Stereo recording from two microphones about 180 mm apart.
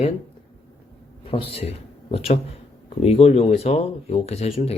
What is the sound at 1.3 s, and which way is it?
A man's voice, 30° left (ahead or behind).